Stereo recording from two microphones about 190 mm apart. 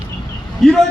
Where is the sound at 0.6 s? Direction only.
Centre (ahead or behind).